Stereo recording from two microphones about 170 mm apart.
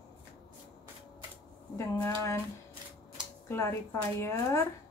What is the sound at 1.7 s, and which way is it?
Speech, 15° left (ahead or behind).